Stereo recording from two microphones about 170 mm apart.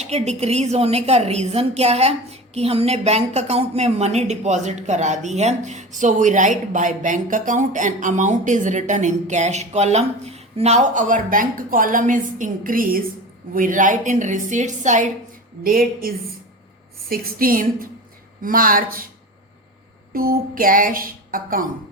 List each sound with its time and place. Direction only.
0.0 s a woman's voice: 40° right (ahead or behind)
15.6 s a woman's voice: 60° right (ahead or behind)
20.1 s a woman's voice: 60° right (ahead or behind)